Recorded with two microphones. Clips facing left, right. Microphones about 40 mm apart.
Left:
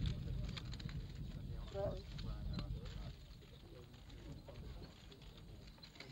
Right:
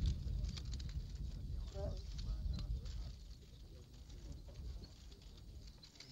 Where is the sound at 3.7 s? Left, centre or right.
Left.